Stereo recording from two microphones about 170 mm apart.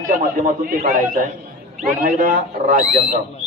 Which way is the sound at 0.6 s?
55° right (ahead or behind).